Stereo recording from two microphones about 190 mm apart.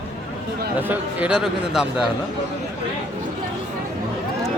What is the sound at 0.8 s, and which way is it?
Speech, 10° right (ahead or behind).